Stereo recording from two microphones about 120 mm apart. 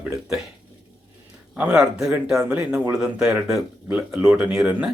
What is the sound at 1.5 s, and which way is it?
Speech, 10° right (ahead or behind).